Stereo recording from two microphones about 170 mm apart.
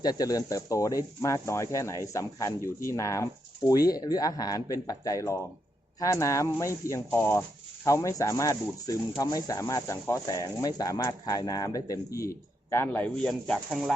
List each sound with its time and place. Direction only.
0.0 s speech: 20° left (ahead or behind); by 13.9 s centre (ahead or behind)